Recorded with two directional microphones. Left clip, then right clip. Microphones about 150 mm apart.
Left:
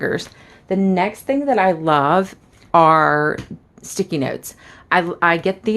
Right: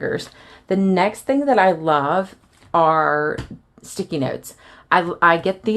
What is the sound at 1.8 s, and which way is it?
Speech, 40° left (ahead or behind).